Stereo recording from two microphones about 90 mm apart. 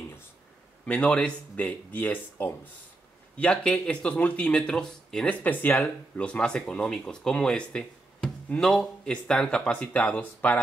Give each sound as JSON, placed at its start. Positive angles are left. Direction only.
{"t": 0.8, "sound": "speech", "side_deg": 15}
{"t": 3.3, "sound": "speech", "side_deg": 10}